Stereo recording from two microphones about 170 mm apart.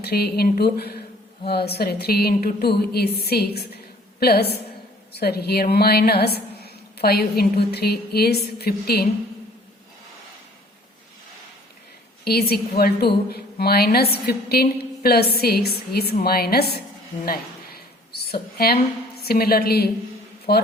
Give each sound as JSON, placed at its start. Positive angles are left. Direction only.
{"t": 0.0, "sound": "a woman's voice", "side_deg": 70}
{"t": 12.2, "sound": "a woman's voice", "side_deg": 70}
{"t": 17.2, "sound": "a sound", "side_deg": 65}
{"t": 19.2, "sound": "a woman's voice", "side_deg": 65}